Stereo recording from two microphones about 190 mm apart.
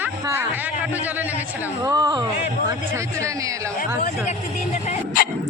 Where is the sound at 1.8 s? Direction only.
20° right (ahead or behind).